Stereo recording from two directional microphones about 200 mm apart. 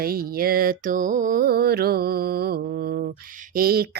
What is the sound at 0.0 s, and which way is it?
Speech, 50° right (ahead or behind).